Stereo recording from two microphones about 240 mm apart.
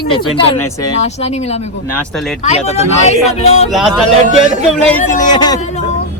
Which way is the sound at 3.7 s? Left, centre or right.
Centre.